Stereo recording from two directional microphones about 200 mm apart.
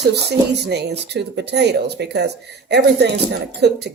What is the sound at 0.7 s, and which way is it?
Speech, 55° right (ahead or behind).